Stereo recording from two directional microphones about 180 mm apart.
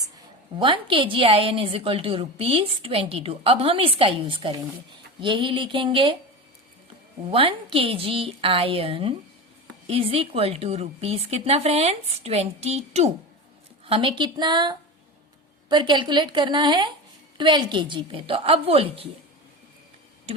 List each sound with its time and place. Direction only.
0.6 s a woman's voice: 30° right (ahead or behind)
7.3 s a woman's voice: 30° right (ahead or behind)